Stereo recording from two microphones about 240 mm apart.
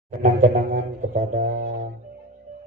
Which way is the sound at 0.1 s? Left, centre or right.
Right.